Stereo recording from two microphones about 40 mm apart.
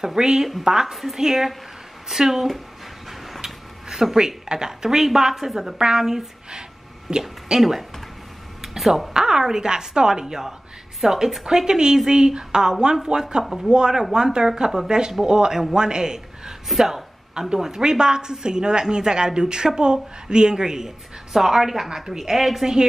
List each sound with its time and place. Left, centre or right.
0.0 s a woman's voice: centre
3.3 s a sound: centre
4.5 s a woman's voice: centre
8.7 s speech: centre
9.1 s a woman's voice: centre
13.4 s a woman's voice: centre
13.7 s a woman's voice: centre
16.6 s a woman's voice: centre
17.3 s a woman's voice: centre